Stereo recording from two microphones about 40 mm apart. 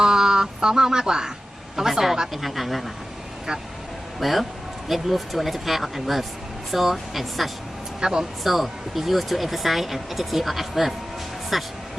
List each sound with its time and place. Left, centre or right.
0.0 s a sound: centre
1.7 s speech: centre
4.2 s speech: centre
8.0 s speech: centre
8.4 s speech: centre